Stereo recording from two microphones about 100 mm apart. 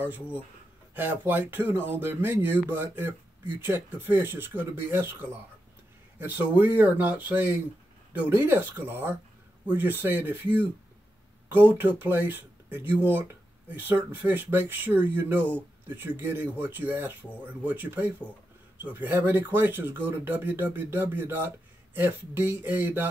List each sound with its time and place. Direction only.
0.0 s speech: 20° right (ahead or behind)